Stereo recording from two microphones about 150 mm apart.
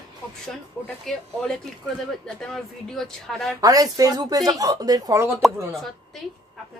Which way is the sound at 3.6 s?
25° right (ahead or behind).